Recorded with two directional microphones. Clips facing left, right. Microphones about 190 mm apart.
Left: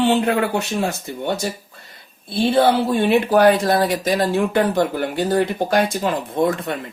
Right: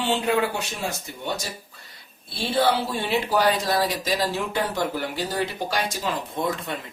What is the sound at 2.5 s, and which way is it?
Speech, 55° left (ahead or behind).